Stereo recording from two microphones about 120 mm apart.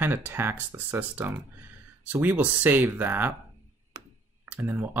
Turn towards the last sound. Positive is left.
turn(degrees=-15)  # may be behind; listen again after turning